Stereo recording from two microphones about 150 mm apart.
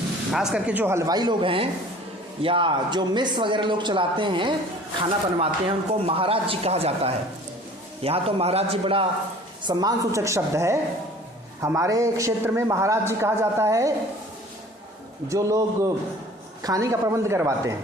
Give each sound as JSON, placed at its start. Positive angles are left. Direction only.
{"t": 0.3, "sound": "a man's voice", "side_deg": -5}
{"t": 9.6, "sound": "a man's voice", "side_deg": -25}
{"t": 15.3, "sound": "a man's voice", "side_deg": -20}